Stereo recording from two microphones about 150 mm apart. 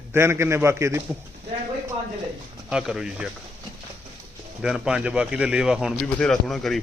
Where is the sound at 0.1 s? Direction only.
15° right (ahead or behind).